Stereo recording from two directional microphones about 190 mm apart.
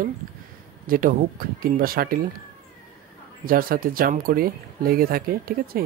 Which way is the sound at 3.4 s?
50° right (ahead or behind).